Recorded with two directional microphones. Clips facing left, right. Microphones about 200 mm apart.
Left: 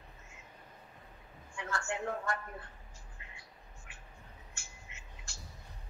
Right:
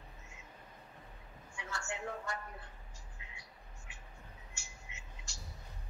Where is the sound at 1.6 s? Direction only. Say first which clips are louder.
Left 5 dB; 55° left (ahead or behind).